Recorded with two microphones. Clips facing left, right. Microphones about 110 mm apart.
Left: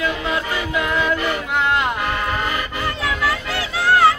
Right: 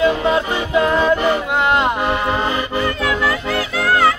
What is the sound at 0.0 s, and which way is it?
Music, 30° right (ahead or behind).